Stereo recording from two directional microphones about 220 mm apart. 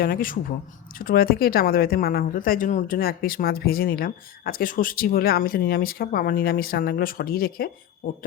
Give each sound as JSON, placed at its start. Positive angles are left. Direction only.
{"t": 0.0, "sound": "speech", "side_deg": 40}